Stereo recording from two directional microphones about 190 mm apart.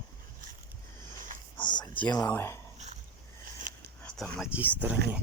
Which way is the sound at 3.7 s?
45° right (ahead or behind).